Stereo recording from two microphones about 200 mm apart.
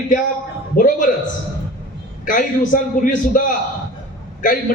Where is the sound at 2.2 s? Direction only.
40° left (ahead or behind).